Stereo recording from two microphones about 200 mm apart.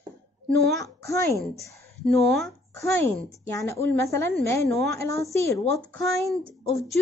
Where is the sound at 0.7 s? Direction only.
15° left (ahead or behind).